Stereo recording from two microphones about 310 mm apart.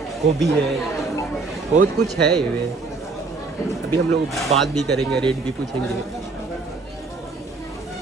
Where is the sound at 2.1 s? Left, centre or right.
Right.